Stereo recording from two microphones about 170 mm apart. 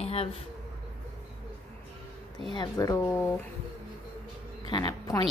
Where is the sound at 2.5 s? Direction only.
25° left (ahead or behind).